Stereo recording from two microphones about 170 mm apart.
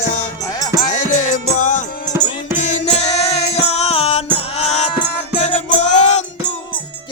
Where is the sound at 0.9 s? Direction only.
45° left (ahead or behind).